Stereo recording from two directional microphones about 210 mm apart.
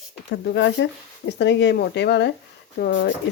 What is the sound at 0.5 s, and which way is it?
Speech, 60° left (ahead or behind).